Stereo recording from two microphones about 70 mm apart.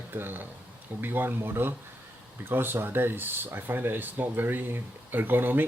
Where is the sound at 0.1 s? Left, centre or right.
Right.